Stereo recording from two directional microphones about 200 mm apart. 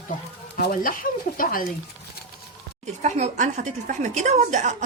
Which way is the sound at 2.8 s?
35° right (ahead or behind).